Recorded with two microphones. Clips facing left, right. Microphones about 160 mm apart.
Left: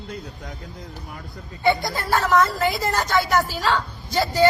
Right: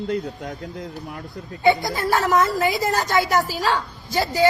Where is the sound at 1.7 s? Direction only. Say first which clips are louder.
Right 2 dB; 20° right (ahead or behind).